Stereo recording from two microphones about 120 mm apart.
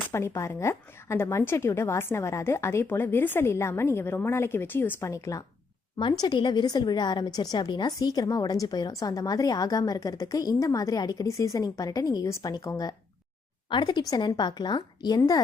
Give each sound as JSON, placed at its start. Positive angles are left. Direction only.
{"t": 0.1, "sound": "a woman's voice", "side_deg": 25}
{"t": 6.0, "sound": "a woman's voice", "side_deg": 40}